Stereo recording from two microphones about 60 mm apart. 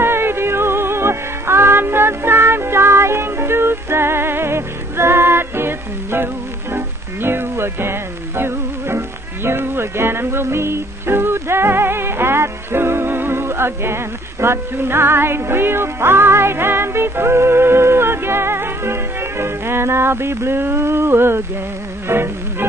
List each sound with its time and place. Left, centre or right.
0.0 s music: right